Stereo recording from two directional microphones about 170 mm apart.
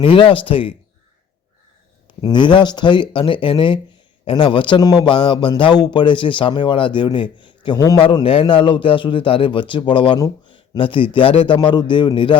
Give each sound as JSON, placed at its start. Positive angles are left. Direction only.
{"t": 0.0, "sound": "speech", "side_deg": 30}
{"t": 2.2, "sound": "a man's voice", "side_deg": 25}